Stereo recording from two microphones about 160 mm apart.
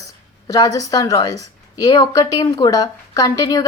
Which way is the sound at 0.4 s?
20° left (ahead or behind).